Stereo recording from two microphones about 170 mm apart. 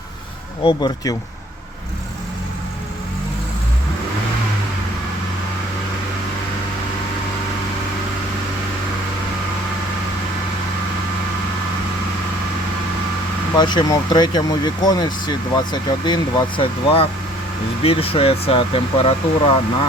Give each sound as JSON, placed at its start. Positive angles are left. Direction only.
{"t": 0.6, "sound": "speech", "side_deg": 25}
{"t": 13.6, "sound": "speech", "side_deg": 25}